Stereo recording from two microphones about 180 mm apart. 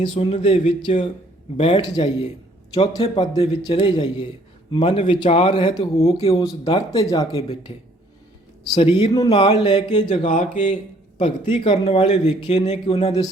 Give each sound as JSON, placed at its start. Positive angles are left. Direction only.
{"t": 0.0, "sound": "speech", "side_deg": 35}
{"t": 6.4, "sound": "speech", "side_deg": 25}
{"t": 8.7, "sound": "speech", "side_deg": 35}
{"t": 10.5, "sound": "speech", "side_deg": 45}